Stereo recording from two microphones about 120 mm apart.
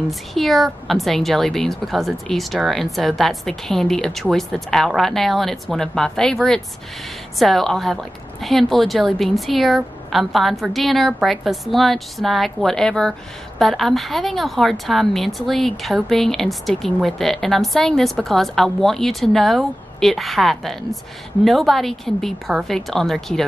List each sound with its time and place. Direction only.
0.3 s a woman's voice: centre (ahead or behind)